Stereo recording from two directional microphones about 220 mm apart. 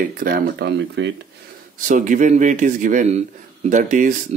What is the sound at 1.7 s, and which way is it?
A man's voice, 35° right (ahead or behind).